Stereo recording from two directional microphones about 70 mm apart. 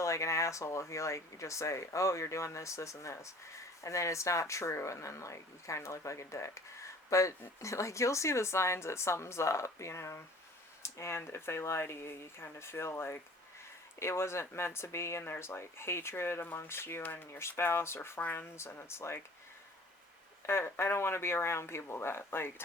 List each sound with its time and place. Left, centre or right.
0.0 s speech: left
20.5 s speech: left